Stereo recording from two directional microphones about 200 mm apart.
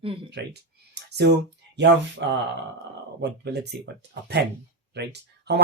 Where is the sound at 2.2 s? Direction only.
60° right (ahead or behind).